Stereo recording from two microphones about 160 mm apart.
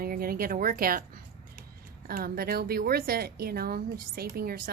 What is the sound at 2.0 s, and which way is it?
Speech, 70° right (ahead or behind).